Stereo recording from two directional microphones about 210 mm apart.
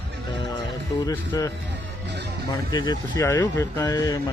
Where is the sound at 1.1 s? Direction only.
15° left (ahead or behind).